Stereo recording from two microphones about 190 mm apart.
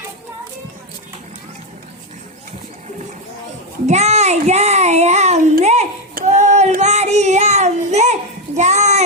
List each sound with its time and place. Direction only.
3.8 s child singing: 35° right (ahead or behind)